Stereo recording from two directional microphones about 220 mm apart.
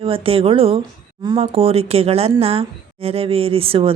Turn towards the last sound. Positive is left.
turn(degrees=-25)  # may be behind; listen again after turning